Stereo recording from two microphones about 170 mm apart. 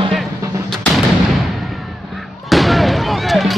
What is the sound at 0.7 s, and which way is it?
Artillery fire, centre (ahead or behind).